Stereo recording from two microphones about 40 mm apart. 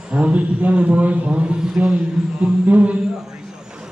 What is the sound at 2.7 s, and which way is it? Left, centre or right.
Speech, right.